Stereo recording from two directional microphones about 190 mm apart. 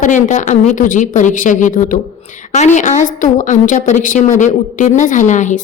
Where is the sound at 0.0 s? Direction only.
40° left (ahead or behind).